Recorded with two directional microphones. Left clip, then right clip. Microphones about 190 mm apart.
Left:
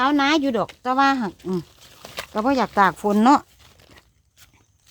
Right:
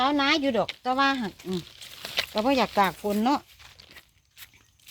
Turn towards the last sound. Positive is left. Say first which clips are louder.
# left 9 dB
turn(degrees=35)  # may be behind; listen again after turning